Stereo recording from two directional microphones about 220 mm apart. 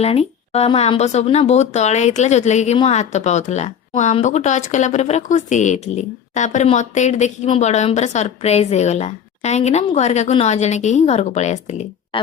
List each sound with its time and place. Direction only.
0.0 s speech: 30° left (ahead or behind)